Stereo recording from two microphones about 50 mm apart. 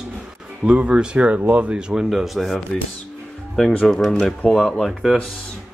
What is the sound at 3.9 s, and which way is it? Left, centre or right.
Speech, centre.